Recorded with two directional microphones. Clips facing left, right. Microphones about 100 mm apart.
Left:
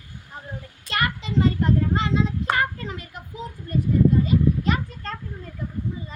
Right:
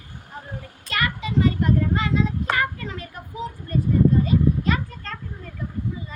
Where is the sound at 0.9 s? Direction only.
30° left (ahead or behind).